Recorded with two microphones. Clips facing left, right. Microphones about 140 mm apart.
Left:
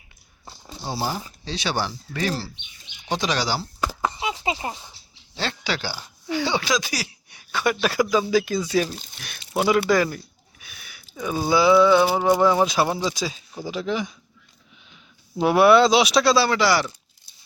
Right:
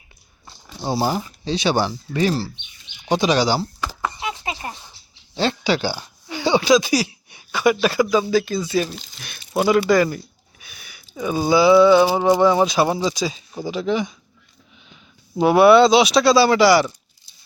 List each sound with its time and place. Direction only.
1.5 s speech: 15° right (ahead or behind)
4.0 s a sound: 20° left (ahead or behind)
5.4 s speech: 15° right (ahead or behind)
7.5 s speech: 5° right (ahead or behind)
8.6 s speech: 5° right (ahead or behind)
10.6 s a sound: centre (ahead or behind)
12.0 s speech: 10° right (ahead or behind)
15.4 s speech: centre (ahead or behind)